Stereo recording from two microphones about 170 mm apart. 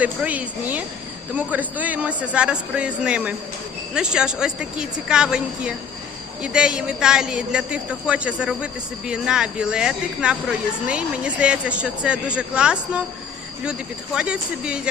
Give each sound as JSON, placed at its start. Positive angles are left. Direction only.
{"t": 0.0, "sound": "a man's voice", "side_deg": -10}